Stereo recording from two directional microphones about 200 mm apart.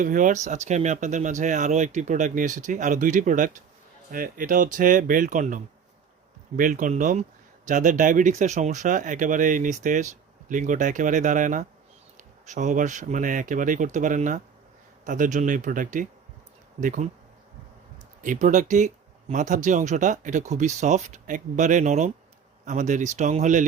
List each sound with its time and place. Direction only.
0.0 s speech: 40° right (ahead or behind)
18.2 s speech: 40° right (ahead or behind)